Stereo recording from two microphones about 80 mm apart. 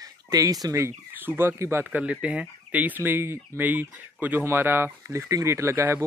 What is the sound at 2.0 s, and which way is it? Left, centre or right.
Speech, centre.